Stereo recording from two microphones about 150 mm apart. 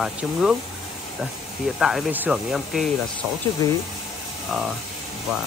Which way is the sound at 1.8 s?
Centre (ahead or behind).